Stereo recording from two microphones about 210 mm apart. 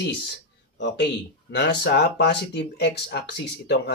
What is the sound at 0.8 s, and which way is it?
Speech, 55° left (ahead or behind).